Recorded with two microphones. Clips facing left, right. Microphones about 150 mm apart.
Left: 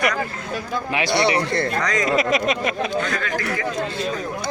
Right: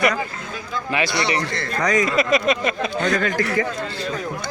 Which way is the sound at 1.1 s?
60° left (ahead or behind).